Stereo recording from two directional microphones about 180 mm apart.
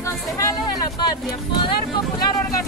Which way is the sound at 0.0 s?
15° left (ahead or behind).